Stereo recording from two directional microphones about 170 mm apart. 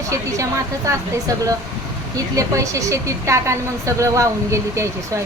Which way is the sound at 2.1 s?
20° right (ahead or behind).